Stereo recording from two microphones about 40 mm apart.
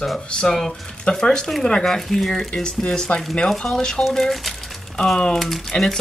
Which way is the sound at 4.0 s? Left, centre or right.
Centre.